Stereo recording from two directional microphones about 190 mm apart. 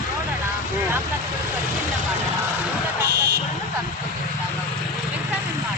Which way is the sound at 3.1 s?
55° right (ahead or behind).